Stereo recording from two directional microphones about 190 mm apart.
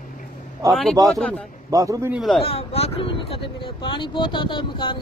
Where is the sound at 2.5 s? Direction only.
30° left (ahead or behind).